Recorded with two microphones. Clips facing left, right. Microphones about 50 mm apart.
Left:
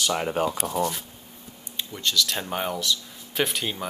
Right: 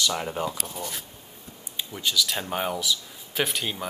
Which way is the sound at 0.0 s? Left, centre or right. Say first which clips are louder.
Left 3 dB; left.